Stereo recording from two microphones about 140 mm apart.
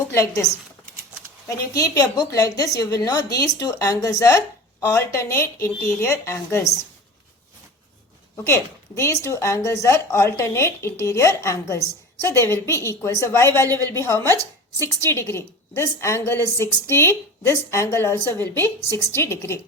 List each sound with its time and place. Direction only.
0.1 s a woman's voice: 20° left (ahead or behind)
1.5 s a woman's voice: 25° left (ahead or behind)
8.4 s a woman's voice: 20° left (ahead or behind)